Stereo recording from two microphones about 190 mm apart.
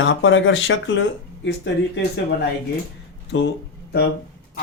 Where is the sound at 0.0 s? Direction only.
80° left.